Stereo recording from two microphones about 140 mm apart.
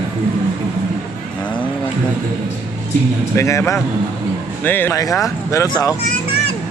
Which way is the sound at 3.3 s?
20° left (ahead or behind).